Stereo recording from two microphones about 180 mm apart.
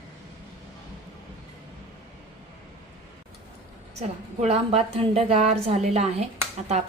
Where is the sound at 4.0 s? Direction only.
35° right (ahead or behind).